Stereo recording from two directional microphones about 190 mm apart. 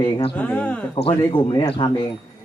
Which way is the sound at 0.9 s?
25° left (ahead or behind).